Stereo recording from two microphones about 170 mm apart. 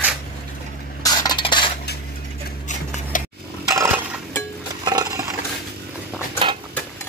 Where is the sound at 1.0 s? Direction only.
25° left (ahead or behind).